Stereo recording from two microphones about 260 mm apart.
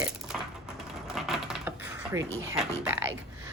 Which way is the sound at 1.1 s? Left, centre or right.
Centre.